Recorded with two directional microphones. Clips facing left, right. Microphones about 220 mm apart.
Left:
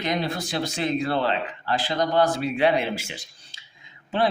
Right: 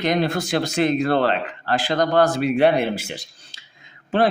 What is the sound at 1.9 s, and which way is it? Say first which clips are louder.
Speech: right 4 dB; 50° right (ahead or behind).